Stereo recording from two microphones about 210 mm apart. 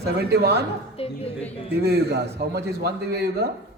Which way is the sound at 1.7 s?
50° right (ahead or behind).